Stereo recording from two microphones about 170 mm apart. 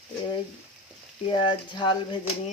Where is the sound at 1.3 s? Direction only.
30° left (ahead or behind).